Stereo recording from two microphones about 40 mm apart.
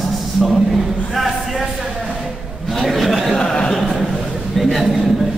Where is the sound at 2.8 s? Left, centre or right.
Centre.